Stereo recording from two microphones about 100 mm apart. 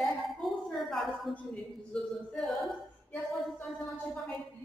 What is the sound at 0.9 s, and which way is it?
Speech, centre (ahead or behind).